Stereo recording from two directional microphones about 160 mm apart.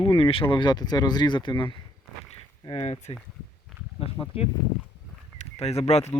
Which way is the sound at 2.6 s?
40° left (ahead or behind).